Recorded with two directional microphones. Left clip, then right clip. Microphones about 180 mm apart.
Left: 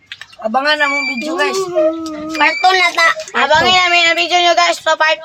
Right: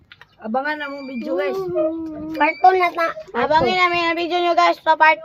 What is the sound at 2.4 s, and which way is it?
Speech, 10° right (ahead or behind).